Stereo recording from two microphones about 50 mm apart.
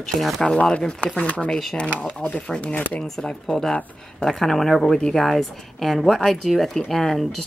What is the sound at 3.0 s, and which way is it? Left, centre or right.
A woman's voice, centre.